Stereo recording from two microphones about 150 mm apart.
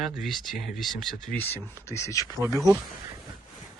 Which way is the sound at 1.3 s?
65° left (ahead or behind).